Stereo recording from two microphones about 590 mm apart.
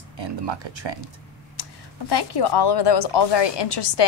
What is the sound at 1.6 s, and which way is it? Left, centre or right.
Speech, left.